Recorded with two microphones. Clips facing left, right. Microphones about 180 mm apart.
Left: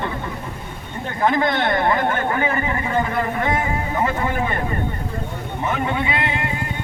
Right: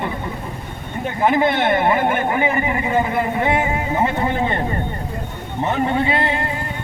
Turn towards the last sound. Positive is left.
turn(degrees=-35)  # may be behind; listen again after turning